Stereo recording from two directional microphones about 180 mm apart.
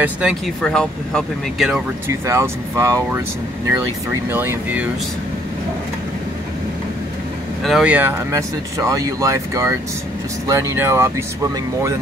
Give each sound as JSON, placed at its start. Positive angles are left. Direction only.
{"t": 0.0, "sound": "speech", "side_deg": -5}
{"t": 2.0, "sound": "speech", "side_deg": -15}
{"t": 4.3, "sound": "speech", "side_deg": -10}
{"t": 7.6, "sound": "speech", "side_deg": -5}